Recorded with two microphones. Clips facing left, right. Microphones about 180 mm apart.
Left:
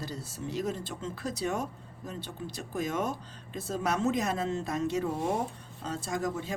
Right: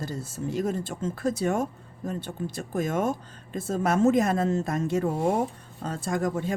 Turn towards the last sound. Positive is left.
turn(degrees=-55)  # may be behind; listen again after turning